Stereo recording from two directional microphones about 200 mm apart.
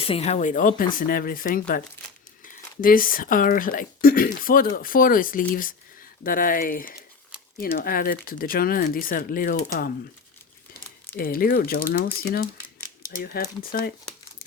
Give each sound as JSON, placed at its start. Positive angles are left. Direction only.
{"t": 0.0, "sound": "speech", "side_deg": 30}
{"t": 2.8, "sound": "speech", "side_deg": 45}
{"t": 11.2, "sound": "speech", "side_deg": 45}